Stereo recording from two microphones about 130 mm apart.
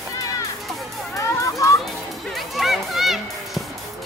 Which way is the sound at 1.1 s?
25° left (ahead or behind).